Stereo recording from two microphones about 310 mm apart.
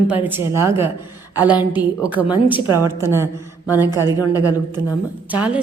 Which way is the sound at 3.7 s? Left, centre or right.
Centre.